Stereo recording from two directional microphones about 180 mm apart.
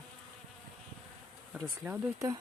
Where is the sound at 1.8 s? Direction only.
15° right (ahead or behind).